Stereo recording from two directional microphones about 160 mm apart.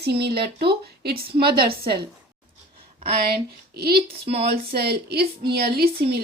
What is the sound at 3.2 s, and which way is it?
Speech, 75° right (ahead or behind).